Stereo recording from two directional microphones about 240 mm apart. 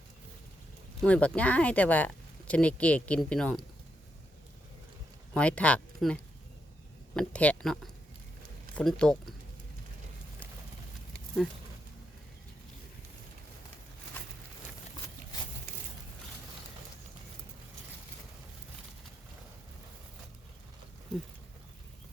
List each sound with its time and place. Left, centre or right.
1.0 s speech: centre
5.3 s speech: centre